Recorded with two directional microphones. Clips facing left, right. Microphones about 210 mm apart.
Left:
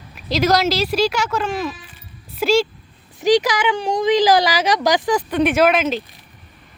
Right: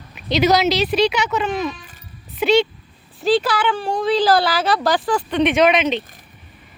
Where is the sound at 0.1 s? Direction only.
Centre (ahead or behind).